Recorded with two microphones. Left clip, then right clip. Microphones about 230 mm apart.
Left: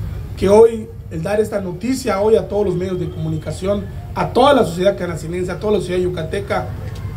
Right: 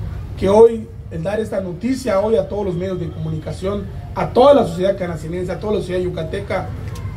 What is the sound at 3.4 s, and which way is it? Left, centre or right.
A man's voice, left.